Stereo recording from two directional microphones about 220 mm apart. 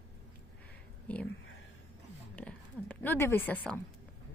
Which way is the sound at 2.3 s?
5° left (ahead or behind).